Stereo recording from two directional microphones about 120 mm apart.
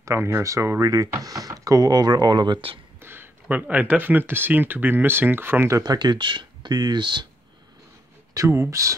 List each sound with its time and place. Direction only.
0.0 s speech: 20° right (ahead or behind); by 2.8 s 45° right (ahead or behind)
3.0 s speech: 20° right (ahead or behind); by 7.2 s 40° right (ahead or behind)
8.4 s speech: 25° right (ahead or behind)